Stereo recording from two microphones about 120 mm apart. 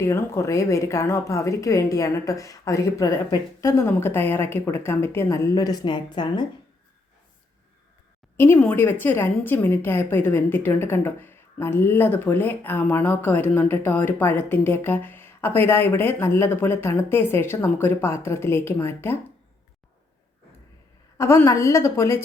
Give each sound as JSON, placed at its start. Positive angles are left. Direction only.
{"t": 0.0, "sound": "a woman's voice", "side_deg": 25}
{"t": 8.5, "sound": "a woman's voice", "side_deg": 15}
{"t": 21.2, "sound": "a woman's voice", "side_deg": 20}